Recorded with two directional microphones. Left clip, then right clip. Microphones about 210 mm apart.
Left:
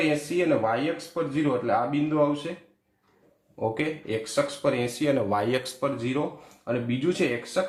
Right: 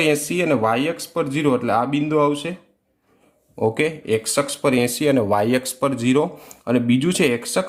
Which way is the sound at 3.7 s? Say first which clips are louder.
Right 8 dB; 45° right (ahead or behind).